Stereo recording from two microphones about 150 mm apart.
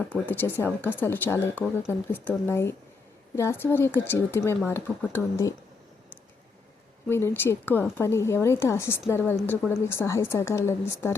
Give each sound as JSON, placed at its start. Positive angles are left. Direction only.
{"t": 0.1, "sound": "speech", "side_deg": 15}
{"t": 7.1, "sound": "speech", "side_deg": 15}